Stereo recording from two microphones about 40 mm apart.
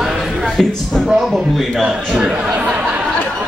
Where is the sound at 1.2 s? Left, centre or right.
Centre.